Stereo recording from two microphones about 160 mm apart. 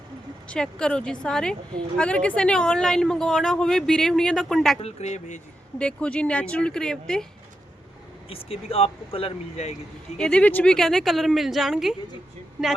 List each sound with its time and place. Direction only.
0.4 s a woman's voice: 5° left (ahead or behind)
4.8 s speech: 40° left (ahead or behind)
5.8 s a woman's voice: 5° left (ahead or behind)
8.3 s speech: 35° left (ahead or behind)
10.2 s a woman's voice: 5° left (ahead or behind)